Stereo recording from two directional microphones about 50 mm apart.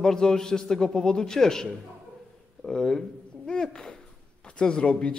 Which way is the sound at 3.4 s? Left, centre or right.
Centre.